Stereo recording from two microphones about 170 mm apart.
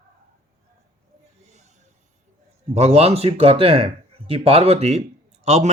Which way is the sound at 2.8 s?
40° right (ahead or behind).